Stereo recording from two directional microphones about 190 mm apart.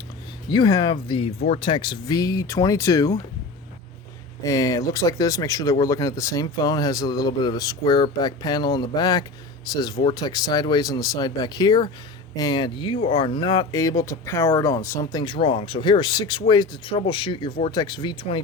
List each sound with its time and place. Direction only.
0.5 s speech: 20° left (ahead or behind)
4.4 s speech: 15° left (ahead or behind)
15.2 s speech: 25° left (ahead or behind)